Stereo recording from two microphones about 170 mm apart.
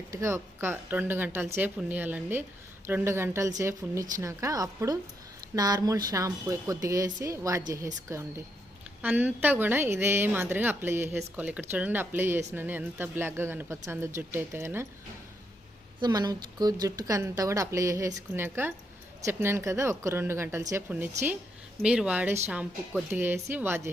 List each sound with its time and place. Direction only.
0.1 s a woman's voice: 15° right (ahead or behind)
16.0 s a woman's voice: 25° right (ahead or behind)